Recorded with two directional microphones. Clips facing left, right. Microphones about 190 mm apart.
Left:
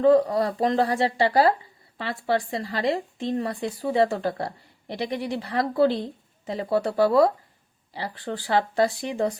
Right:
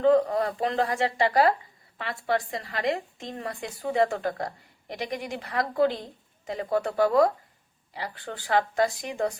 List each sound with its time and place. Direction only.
0.0 s a woman's voice: 35° left (ahead or behind)